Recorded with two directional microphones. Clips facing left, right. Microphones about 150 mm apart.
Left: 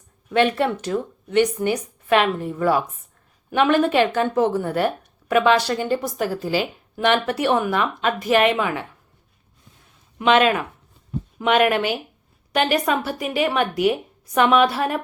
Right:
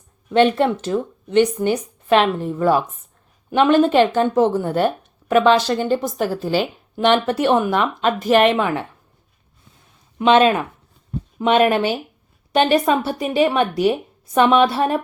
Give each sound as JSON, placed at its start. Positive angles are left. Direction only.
{"t": 0.3, "sound": "speech", "side_deg": -25}
{"t": 6.1, "sound": "a woman's voice", "side_deg": 0}
{"t": 6.9, "sound": "speech", "side_deg": -25}
{"t": 10.2, "sound": "speech", "side_deg": -30}